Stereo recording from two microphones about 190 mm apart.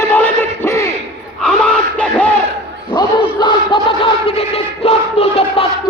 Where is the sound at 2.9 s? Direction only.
25° left (ahead or behind).